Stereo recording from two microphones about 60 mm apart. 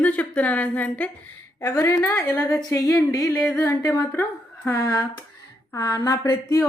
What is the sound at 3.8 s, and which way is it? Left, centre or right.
Speech, left.